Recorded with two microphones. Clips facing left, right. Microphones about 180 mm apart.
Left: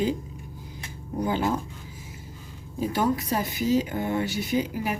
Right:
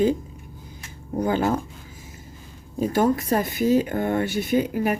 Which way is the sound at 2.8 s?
50° right (ahead or behind).